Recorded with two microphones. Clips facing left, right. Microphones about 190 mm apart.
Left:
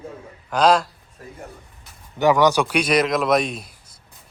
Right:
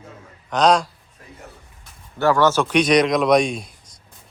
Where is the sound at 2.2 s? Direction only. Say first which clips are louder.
Left 1 dB; 15° left (ahead or behind).